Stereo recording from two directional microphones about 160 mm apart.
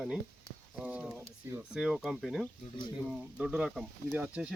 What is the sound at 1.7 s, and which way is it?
Speech, centre (ahead or behind).